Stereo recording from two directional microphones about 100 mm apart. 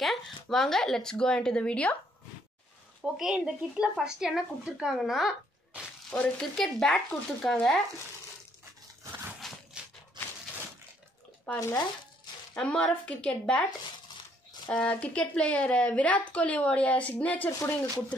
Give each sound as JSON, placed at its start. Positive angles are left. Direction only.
{"t": 0.0, "sound": "speech", "side_deg": 0}
{"t": 3.0, "sound": "a woman's voice", "side_deg": -5}
{"t": 6.0, "sound": "a woman's voice", "side_deg": 10}
{"t": 9.4, "sound": "a sound", "side_deg": 5}
{"t": 10.2, "sound": "a sound", "side_deg": -45}
{"t": 11.5, "sound": "a woman's voice", "side_deg": 10}
{"t": 14.7, "sound": "a woman's voice", "side_deg": 15}